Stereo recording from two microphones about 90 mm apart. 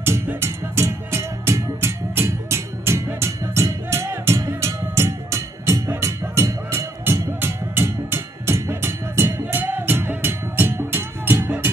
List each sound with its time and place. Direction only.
0.0 s music: 25° right (ahead or behind)